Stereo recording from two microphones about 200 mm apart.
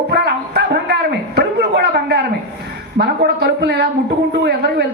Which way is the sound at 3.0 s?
55° right (ahead or behind).